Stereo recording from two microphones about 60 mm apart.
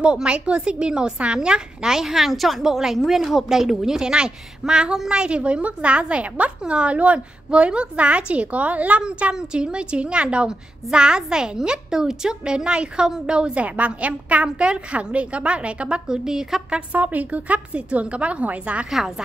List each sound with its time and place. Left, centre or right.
0.0 s a woman's voice: centre
9.0 s a woman's voice: centre
16.7 s a woman's voice: right
18.9 s a woman's voice: centre